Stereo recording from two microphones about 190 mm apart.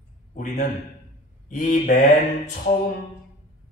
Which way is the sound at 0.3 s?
45° left (ahead or behind).